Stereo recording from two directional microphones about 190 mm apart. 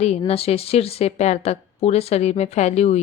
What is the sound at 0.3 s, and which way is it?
Speech, 30° left (ahead or behind).